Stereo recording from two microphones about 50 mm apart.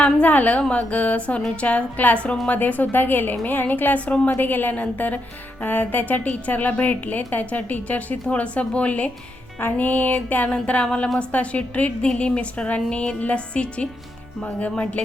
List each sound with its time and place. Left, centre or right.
0.0 s a woman's voice: left
4.4 s a woman's voice: left
9.6 s a woman's voice: left